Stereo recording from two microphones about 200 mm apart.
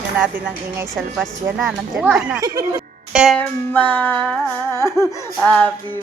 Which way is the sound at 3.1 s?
Centre (ahead or behind).